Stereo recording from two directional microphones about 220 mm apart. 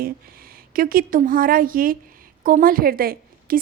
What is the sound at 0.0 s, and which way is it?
A woman's voice, 40° right (ahead or behind).